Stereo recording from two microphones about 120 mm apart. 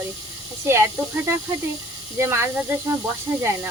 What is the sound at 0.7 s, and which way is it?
Speech, 20° right (ahead or behind).